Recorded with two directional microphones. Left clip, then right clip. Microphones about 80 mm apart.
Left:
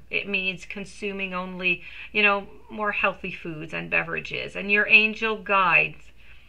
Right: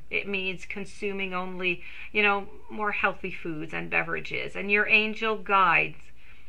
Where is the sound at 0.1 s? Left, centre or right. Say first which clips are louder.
Left 3 dB; right.